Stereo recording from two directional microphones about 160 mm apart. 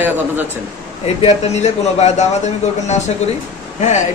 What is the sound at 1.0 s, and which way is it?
Speech, 40° left (ahead or behind).